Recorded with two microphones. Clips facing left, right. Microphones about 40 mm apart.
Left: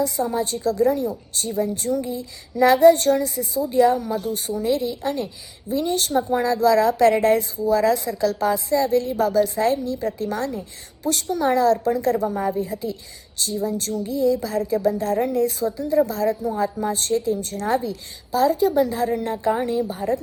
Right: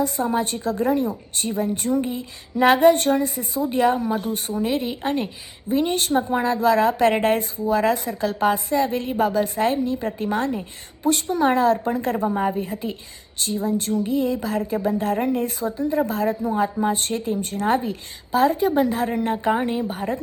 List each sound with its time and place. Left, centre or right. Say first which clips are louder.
0.0 s a woman's voice: even; right
19.9 s speech: left 2 dB; right